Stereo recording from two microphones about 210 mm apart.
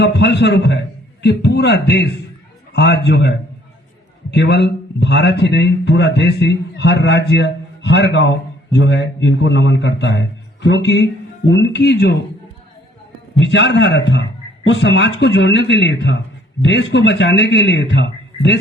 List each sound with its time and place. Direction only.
0.0 s a man's voice: 55° left (ahead or behind)
13.4 s speech: 60° left (ahead or behind)